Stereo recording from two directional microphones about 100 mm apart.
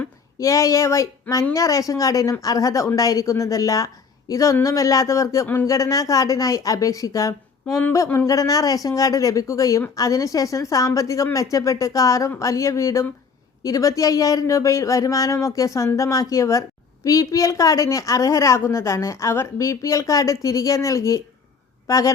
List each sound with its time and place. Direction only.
0.3 s a woman's voice: 30° left (ahead or behind)